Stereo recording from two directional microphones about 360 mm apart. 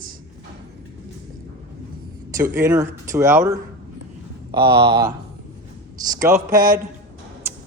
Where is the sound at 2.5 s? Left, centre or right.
Centre.